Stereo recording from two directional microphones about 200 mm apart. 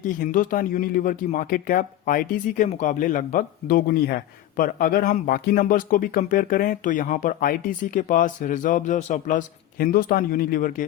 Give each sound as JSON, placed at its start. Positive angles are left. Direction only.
{"t": 0.0, "sound": "speech", "side_deg": 40}